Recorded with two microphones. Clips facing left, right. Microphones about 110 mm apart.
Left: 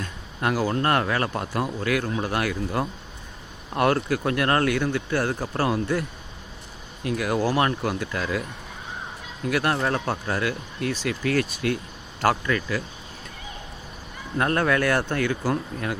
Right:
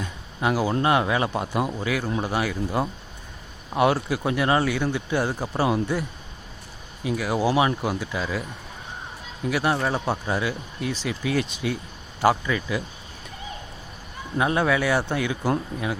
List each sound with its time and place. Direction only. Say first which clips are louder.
0.0 s speech: right 1 dB; 10° right (ahead or behind)
9.5 s speech: even; 5° right (ahead or behind)
14.3 s speech: even; 10° right (ahead or behind)